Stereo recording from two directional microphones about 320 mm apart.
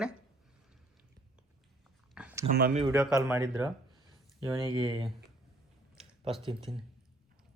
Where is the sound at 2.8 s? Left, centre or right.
Centre.